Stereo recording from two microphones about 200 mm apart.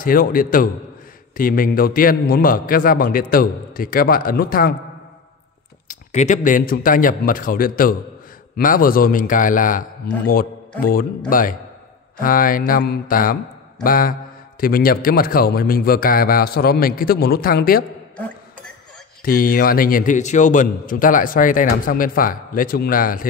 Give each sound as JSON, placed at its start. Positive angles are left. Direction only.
{"t": 0.0, "sound": "a man's voice", "side_deg": 45}
{"t": 5.9, "sound": "a man's voice", "side_deg": 40}
{"t": 19.2, "sound": "a man's voice", "side_deg": 45}